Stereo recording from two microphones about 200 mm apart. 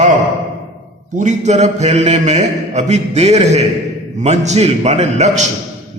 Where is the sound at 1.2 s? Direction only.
35° right (ahead or behind).